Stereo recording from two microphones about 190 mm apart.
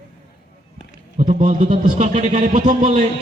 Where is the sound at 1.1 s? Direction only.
35° right (ahead or behind).